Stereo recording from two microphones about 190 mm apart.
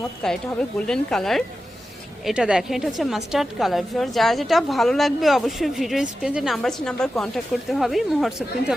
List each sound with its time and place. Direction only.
0.2 s a woman's voice: 5° left (ahead or behind)